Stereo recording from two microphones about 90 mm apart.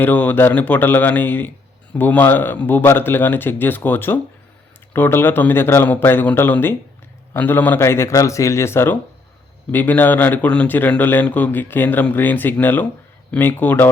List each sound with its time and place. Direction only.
0.0 s speech: 20° left (ahead or behind)